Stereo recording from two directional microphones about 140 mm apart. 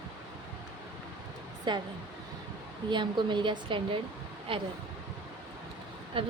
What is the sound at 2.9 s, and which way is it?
A woman's voice, 35° right (ahead or behind).